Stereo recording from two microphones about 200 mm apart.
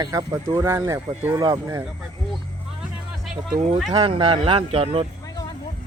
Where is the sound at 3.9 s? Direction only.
25° right (ahead or behind).